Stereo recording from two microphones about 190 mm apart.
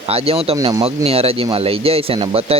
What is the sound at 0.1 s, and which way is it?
Speech, 30° right (ahead or behind).